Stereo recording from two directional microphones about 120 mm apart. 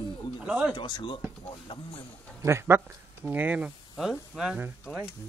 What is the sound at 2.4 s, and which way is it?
Speech, 20° right (ahead or behind).